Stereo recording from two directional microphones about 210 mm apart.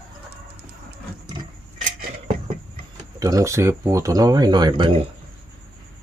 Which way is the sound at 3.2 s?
15° right (ahead or behind).